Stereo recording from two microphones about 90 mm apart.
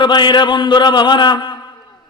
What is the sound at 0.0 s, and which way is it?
A man's voice, 60° left (ahead or behind).